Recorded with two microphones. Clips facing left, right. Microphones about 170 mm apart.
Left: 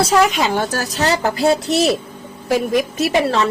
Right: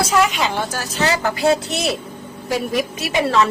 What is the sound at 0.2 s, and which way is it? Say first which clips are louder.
A woman's voice: left 3 dB; 40° left (ahead or behind).